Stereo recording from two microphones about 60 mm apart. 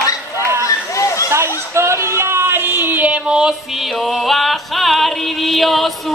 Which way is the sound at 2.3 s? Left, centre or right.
Right.